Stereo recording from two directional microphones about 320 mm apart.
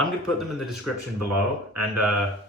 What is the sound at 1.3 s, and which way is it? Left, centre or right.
Speech, right.